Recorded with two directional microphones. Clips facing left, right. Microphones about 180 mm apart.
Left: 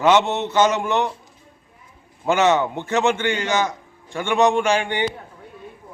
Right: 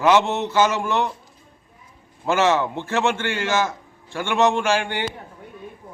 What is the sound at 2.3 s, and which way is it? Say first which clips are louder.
A man's voice: left 2 dB; 20° left (ahead or behind).